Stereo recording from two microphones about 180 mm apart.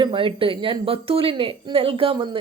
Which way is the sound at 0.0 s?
30° right (ahead or behind).